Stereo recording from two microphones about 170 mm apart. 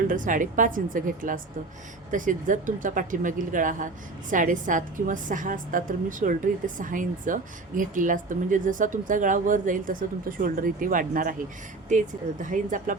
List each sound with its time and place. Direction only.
0.1 s a woman's voice: 50° right (ahead or behind)